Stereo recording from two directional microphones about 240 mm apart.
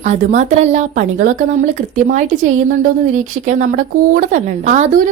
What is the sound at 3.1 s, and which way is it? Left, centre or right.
A woman's voice, right.